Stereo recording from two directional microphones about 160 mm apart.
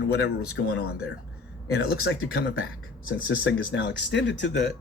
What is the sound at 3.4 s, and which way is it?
Speech, 90° left.